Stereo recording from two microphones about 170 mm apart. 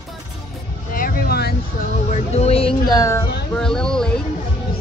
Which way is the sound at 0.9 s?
60° left (ahead or behind).